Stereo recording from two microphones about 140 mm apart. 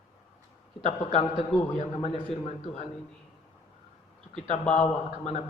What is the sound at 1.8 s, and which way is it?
A man's voice, 50° left (ahead or behind).